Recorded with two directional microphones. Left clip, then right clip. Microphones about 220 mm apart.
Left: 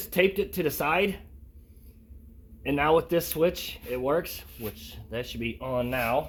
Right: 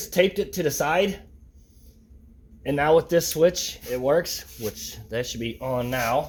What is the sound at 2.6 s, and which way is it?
Speech, centre (ahead or behind).